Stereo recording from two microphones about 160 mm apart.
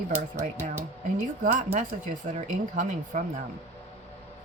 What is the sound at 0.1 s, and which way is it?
Speech, 15° right (ahead or behind).